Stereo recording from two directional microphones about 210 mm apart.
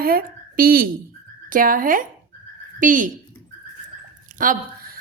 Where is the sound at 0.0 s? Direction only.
45° right (ahead or behind).